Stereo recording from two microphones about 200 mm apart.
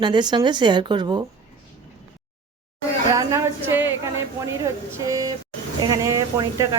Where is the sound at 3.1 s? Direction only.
15° right (ahead or behind).